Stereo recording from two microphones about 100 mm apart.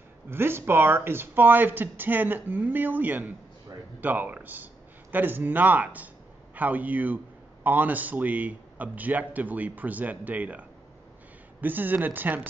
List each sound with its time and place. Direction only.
0.3 s a man's voice: 25° right (ahead or behind)
11.6 s speech: 20° right (ahead or behind)